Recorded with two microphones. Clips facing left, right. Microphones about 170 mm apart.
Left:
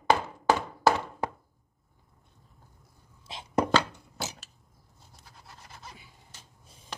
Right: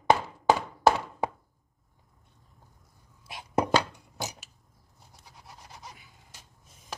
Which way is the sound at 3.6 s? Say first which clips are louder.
Even; 15° right (ahead or behind).